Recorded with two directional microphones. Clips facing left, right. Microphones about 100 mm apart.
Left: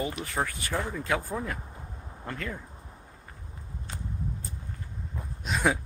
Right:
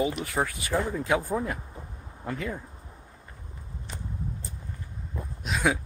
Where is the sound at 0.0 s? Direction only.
15° right (ahead or behind).